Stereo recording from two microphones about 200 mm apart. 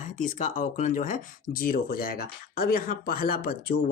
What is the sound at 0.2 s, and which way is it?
Speech, 40° left (ahead or behind).